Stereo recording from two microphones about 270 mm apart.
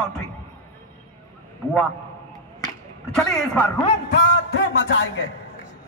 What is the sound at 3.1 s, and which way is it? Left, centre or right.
Speech, centre.